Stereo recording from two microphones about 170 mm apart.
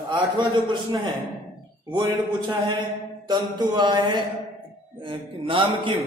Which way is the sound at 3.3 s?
25° right (ahead or behind).